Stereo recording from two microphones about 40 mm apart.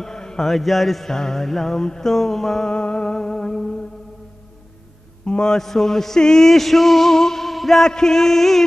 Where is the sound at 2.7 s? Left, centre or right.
Left.